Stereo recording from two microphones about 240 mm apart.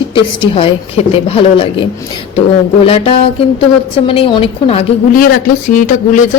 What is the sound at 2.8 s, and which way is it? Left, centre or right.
A woman's voice, left.